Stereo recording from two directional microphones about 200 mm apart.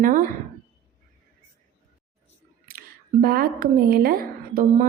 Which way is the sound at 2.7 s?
50° right (ahead or behind).